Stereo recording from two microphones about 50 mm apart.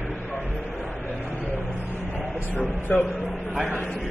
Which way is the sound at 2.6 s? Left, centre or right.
Left.